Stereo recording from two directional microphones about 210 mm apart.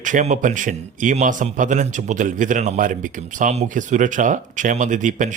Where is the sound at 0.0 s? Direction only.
35° right (ahead or behind).